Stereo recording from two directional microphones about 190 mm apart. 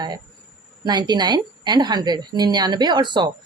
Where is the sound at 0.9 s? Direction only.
20° right (ahead or behind).